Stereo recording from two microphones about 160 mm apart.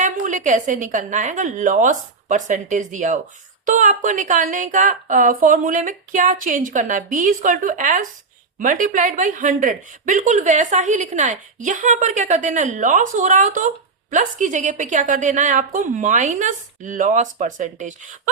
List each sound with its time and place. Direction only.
0.0 s a woman's voice: 50° right (ahead or behind)